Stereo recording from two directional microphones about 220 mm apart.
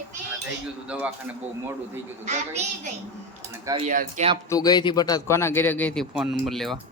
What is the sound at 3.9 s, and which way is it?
Speech, 35° right (ahead or behind).